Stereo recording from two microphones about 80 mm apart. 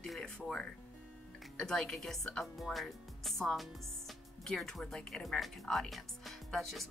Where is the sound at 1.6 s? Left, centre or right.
Centre.